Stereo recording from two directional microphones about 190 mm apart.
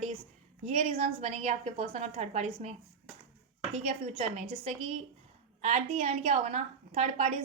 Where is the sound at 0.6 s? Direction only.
35° right (ahead or behind).